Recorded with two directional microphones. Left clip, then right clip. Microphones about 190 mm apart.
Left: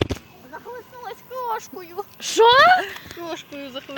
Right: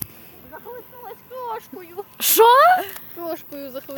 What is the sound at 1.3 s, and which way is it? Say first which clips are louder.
Speech: left 3 dB; 50° left (ahead or behind).